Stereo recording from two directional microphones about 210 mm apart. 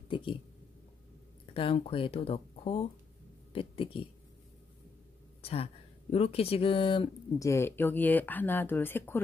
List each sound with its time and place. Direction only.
0.1 s a sound: 25° left (ahead or behind)
1.4 s speech: 25° left (ahead or behind)
5.4 s speech: 30° left (ahead or behind); by 9.2 s 10° left (ahead or behind)